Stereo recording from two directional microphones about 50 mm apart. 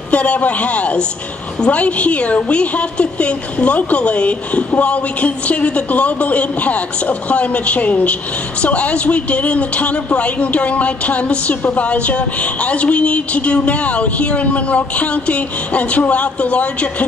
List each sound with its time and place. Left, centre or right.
0.1 s a woman's voice: left